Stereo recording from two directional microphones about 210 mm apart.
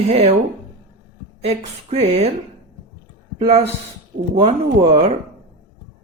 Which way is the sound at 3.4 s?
30° right (ahead or behind).